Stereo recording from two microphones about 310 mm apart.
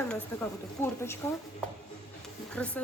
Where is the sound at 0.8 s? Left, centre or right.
Centre.